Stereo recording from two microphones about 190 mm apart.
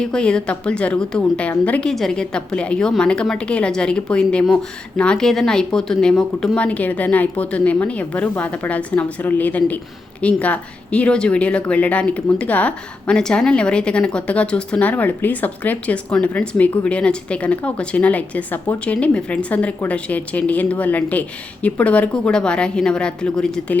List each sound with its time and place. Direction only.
0.0 s a woman's voice: 5° left (ahead or behind)